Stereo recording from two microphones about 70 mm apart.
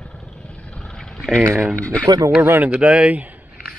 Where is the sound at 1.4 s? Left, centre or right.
Right.